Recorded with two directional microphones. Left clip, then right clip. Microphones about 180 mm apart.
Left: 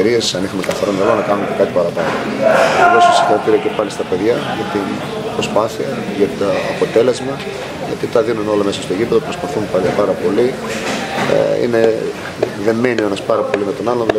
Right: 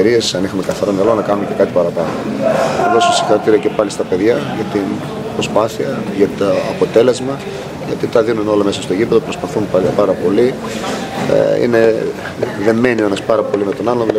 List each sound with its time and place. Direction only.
0.0 s speech: centre (ahead or behind)
2.5 s speech: 20° left (ahead or behind)
3.0 s speech: centre (ahead or behind)